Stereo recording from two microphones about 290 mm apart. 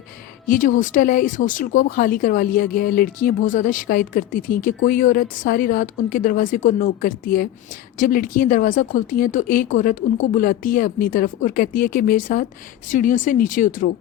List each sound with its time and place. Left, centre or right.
0.4 s speech: left